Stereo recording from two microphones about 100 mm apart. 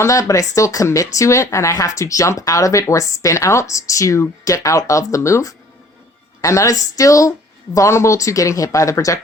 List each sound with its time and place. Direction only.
0.0 s speech: 30° left (ahead or behind)